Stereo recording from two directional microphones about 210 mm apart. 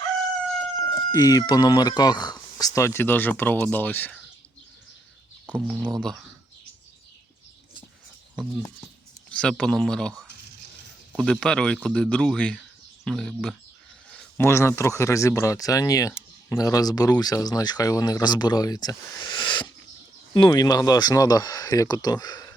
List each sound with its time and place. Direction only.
1.1 s speech: 15° left (ahead or behind)
5.5 s speech: 5° right (ahead or behind)
9.3 s speech: 5° left (ahead or behind)
11.1 s speech: centre (ahead or behind); by 22.5 s 20° left (ahead or behind)